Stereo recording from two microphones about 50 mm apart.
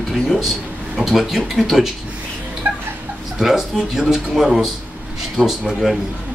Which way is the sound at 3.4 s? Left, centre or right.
Centre.